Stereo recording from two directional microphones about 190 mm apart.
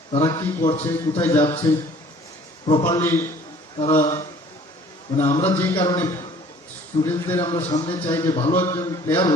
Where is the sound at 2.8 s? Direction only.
15° left (ahead or behind).